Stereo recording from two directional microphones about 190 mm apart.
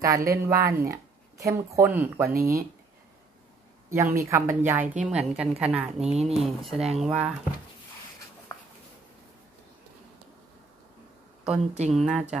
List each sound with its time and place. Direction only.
0.0 s a woman's voice: 15° right (ahead or behind)
2.3 s speech: 50° right (ahead or behind)
3.9 s a woman's voice: 15° right (ahead or behind)
8.5 s a sound: 15° left (ahead or behind)
11.5 s a woman's voice: 35° right (ahead or behind)
11.9 s a woman's voice: centre (ahead or behind)